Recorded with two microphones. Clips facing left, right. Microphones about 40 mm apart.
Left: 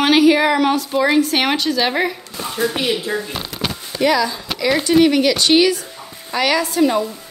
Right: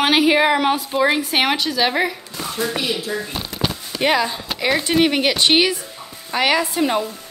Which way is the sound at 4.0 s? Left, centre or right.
Right.